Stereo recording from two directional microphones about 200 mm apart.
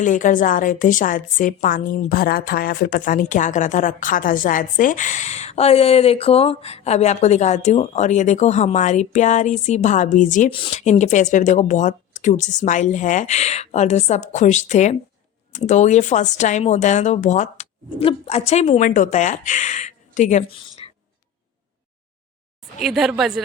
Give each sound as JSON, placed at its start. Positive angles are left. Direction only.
{"t": 0.0, "sound": "a woman's voice", "side_deg": 40}
{"t": 22.8, "sound": "speech", "side_deg": 0}